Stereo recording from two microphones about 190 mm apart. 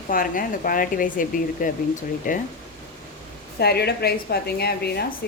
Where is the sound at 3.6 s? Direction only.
55° left (ahead or behind).